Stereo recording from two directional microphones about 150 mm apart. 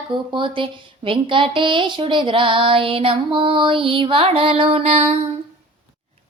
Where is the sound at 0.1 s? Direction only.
35° right (ahead or behind).